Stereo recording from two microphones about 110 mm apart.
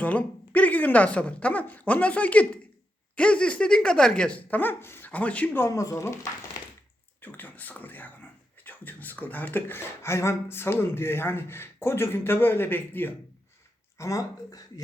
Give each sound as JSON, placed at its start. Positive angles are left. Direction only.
{"t": 0.0, "sound": "a woman's voice", "side_deg": 15}
{"t": 5.6, "sound": "speech", "side_deg": 30}
{"t": 7.2, "sound": "speech", "side_deg": 15}
{"t": 14.0, "sound": "speech", "side_deg": 30}